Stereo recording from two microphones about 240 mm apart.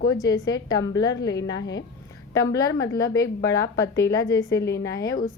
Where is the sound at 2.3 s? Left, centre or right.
Centre.